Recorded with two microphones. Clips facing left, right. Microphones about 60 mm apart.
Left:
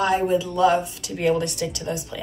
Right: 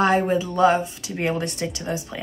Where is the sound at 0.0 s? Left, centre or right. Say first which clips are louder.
Right 1 dB; right.